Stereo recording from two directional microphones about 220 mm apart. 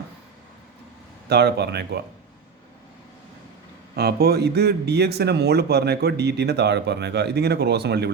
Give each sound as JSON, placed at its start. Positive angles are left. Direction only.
{"t": 1.3, "sound": "a man's voice", "side_deg": -50}
{"t": 3.9, "sound": "a man's voice", "side_deg": -45}